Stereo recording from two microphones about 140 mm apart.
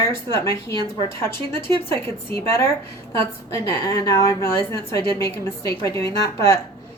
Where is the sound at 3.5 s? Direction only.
20° left (ahead or behind).